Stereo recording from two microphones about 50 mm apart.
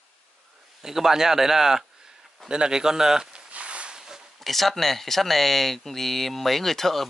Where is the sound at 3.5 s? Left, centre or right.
Right.